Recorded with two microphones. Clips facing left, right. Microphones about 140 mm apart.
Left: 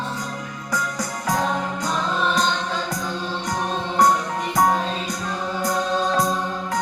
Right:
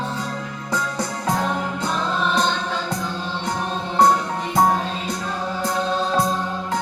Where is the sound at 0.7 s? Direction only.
30° right (ahead or behind).